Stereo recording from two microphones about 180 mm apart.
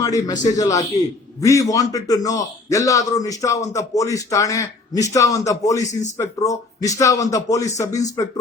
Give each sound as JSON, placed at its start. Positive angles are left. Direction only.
{"t": 0.0, "sound": "a man's voice", "side_deg": 20}